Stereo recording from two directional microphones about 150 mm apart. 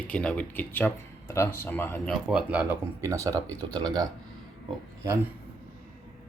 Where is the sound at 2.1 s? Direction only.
5° right (ahead or behind); by 4.0 s 25° right (ahead or behind).